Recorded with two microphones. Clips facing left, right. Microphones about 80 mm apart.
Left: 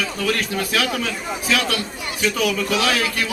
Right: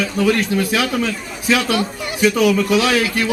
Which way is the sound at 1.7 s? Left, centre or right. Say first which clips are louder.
Right 6 dB; centre.